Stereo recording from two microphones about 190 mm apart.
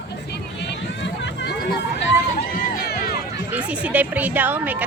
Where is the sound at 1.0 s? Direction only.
65° left (ahead or behind).